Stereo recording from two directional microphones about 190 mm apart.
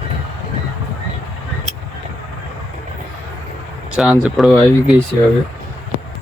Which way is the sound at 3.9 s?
5° right (ahead or behind).